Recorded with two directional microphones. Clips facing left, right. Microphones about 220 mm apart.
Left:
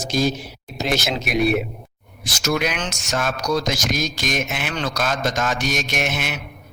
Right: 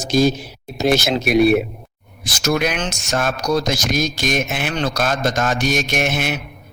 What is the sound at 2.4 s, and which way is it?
Mantra, 55° right (ahead or behind).